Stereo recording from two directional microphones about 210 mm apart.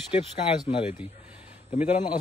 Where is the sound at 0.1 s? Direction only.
25° left (ahead or behind).